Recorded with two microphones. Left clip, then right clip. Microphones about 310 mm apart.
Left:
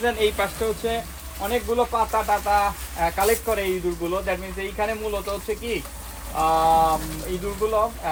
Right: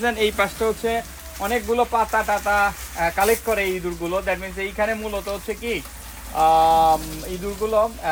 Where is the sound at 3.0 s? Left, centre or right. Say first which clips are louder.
Right 2 dB; right.